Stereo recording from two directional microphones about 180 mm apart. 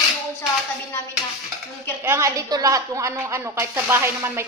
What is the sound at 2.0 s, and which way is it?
A woman's voice, 15° right (ahead or behind).